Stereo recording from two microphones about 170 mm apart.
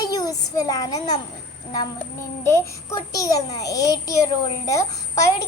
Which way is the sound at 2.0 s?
15° left (ahead or behind).